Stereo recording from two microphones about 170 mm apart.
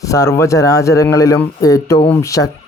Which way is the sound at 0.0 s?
20° left (ahead or behind).